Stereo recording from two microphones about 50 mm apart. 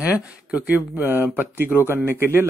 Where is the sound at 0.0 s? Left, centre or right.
Right.